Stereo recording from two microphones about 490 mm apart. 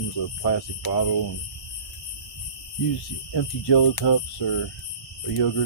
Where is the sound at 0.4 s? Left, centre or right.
Left.